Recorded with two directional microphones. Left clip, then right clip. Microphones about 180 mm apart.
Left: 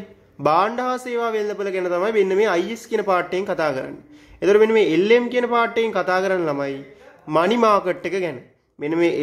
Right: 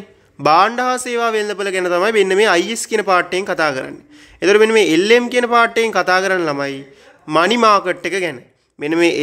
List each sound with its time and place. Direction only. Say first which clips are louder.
0.4 s a man's voice: right 6 dB; 10° right (ahead or behind)